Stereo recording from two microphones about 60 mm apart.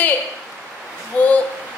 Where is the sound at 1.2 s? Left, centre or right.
Left.